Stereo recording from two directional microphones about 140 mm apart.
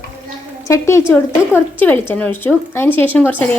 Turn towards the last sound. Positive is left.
turn(degrees=15)  # may be behind; listen again after turning